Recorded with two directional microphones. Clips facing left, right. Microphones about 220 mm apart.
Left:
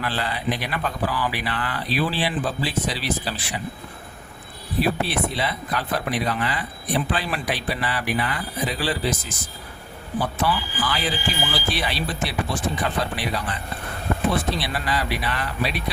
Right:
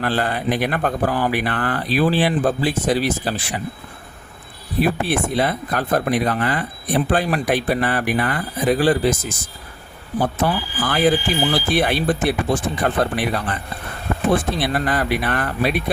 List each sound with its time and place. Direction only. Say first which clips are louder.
0.0 s speech: right 5 dB; 50° right (ahead or behind)
4.8 s speech: right 3 dB; 50° right (ahead or behind)